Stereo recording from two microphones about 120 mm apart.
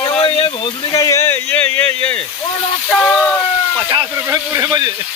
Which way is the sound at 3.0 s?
10° left (ahead or behind).